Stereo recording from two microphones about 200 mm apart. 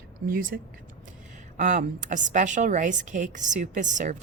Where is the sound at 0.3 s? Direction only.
45° right (ahead or behind).